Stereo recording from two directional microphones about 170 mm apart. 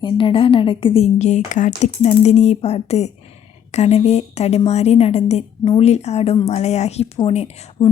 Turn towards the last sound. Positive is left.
turn(degrees=40)  # may be behind; listen again after turning